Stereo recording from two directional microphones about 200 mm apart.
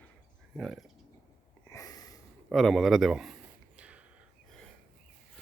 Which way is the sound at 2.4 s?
Centre (ahead or behind).